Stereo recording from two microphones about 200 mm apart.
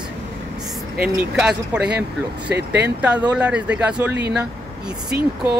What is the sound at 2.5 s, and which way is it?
Speech, 55° right (ahead or behind).